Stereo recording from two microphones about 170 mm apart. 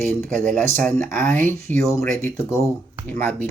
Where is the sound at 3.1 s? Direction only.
10° left (ahead or behind).